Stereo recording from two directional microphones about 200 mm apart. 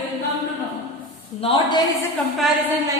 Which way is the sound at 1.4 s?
30° left (ahead or behind).